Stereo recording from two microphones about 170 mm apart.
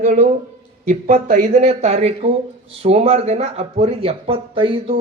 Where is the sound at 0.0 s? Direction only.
45° right (ahead or behind).